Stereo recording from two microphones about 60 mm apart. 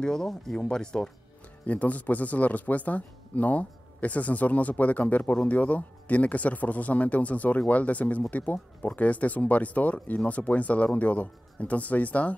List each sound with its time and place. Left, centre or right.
0.0 s speech: centre
1.7 s speech: left